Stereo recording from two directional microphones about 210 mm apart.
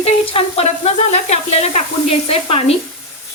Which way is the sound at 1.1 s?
30° left (ahead or behind).